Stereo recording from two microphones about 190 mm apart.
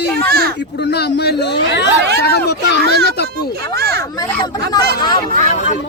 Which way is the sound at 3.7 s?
55° right (ahead or behind).